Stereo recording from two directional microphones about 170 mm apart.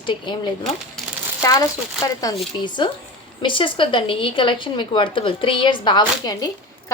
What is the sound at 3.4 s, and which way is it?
A woman's voice, 30° left (ahead or behind).